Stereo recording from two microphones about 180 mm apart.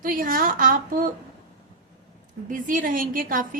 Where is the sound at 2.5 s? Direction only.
45° right (ahead or behind).